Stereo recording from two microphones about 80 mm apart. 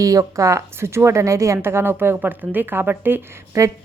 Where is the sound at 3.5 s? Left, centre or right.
Right.